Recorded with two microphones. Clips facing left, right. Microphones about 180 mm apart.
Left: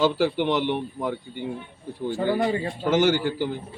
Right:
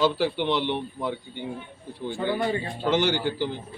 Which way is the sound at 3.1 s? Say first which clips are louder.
Left 3 dB; 10° left (ahead or behind).